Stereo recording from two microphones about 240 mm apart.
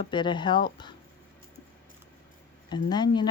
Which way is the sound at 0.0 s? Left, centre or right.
Centre.